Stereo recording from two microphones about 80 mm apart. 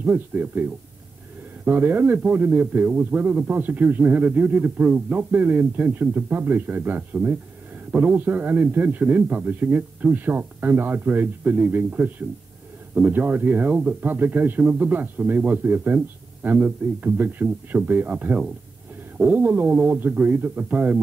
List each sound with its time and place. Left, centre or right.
0.0 s a man's voice: right